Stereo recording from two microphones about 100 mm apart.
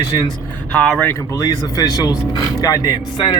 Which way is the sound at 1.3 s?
35° left (ahead or behind).